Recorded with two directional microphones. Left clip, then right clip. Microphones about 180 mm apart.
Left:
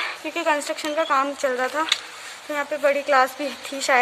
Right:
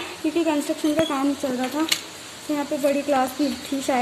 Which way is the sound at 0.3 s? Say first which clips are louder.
Even; 15° left (ahead or behind).